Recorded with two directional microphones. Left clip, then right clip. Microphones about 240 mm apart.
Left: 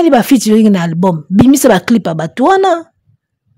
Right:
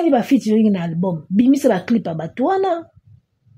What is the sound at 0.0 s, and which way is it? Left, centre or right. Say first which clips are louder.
Speech: left 7 dB; left.